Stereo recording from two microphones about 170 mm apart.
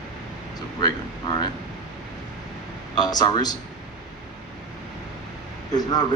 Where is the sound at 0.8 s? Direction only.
25° left (ahead or behind).